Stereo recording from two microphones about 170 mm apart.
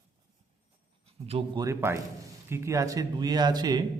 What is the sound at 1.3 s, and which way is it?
Speech, 30° right (ahead or behind).